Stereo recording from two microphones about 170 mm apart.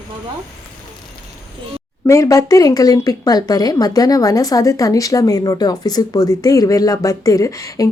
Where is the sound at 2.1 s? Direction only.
20° left (ahead or behind).